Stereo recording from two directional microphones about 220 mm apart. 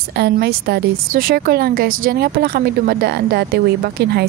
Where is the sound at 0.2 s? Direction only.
50° right (ahead or behind).